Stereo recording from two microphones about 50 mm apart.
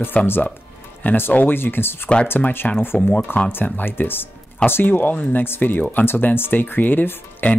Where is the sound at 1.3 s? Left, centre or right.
Left.